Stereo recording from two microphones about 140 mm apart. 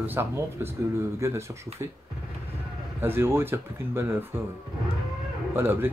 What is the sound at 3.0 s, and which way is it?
Speech, 15° right (ahead or behind).